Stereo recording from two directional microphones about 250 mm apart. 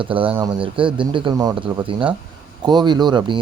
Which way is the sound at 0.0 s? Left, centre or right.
Right.